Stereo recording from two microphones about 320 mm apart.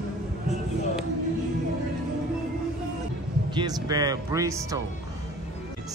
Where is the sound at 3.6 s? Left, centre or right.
Centre.